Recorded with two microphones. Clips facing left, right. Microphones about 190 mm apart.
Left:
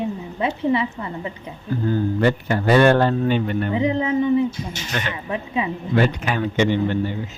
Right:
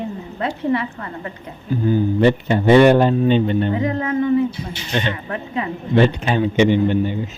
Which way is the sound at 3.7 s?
15° left (ahead or behind).